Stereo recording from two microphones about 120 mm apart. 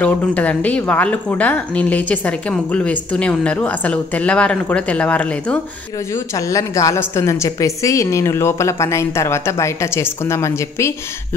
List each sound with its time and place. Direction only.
0.0 s speech: 10° left (ahead or behind)
6.3 s a woman's voice: 25° left (ahead or behind)